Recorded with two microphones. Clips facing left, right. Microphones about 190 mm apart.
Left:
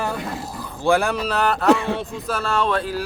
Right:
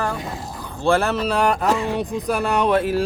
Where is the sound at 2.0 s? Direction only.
15° right (ahead or behind).